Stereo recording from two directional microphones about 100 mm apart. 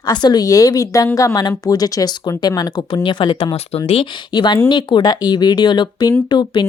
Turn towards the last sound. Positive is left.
turn(degrees=45)  # may be behind; listen again after turning